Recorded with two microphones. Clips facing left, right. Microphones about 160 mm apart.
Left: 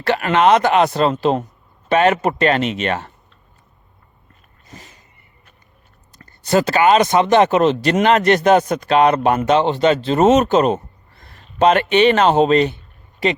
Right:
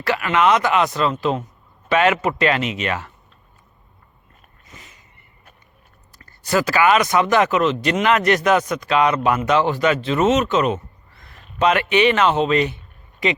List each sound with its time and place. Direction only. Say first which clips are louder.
0.0 s speech: left 3 dB; 35° left (ahead or behind)
1.9 s a man's voice: left 3 dB; 45° left (ahead or behind)
2.8 s speech: left 3 dB; 30° left (ahead or behind)
4.7 s a sound: left 5 dB; 35° left (ahead or behind)
6.2 s speech: left 4 dB; 25° left (ahead or behind)